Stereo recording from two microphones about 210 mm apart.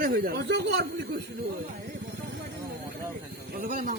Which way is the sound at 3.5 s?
40° right (ahead or behind).